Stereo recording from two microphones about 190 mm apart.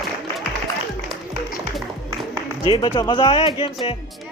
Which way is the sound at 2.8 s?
25° left (ahead or behind).